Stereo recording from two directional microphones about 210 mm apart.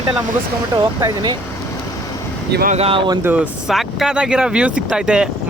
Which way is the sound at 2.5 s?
45° right (ahead or behind).